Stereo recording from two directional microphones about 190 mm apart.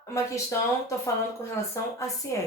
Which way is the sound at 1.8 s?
15° left (ahead or behind).